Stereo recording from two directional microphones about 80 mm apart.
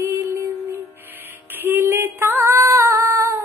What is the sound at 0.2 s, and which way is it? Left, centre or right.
Music, right.